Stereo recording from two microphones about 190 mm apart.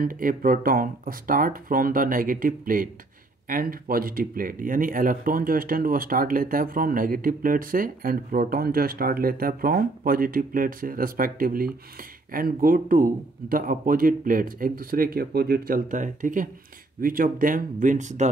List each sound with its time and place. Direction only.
0.0 s speech: 45° right (ahead or behind)